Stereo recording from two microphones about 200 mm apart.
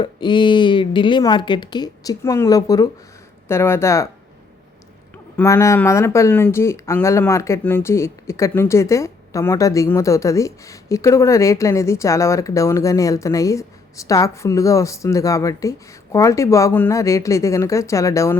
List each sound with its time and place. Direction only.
0.0 s a woman's voice: 25° left (ahead or behind)
5.1 s speech: 10° left (ahead or behind)